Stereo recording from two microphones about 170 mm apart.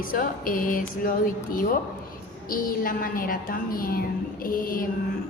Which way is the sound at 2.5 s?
55° left (ahead or behind).